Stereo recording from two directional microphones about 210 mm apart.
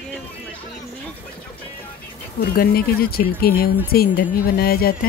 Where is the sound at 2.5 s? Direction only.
45° left (ahead or behind).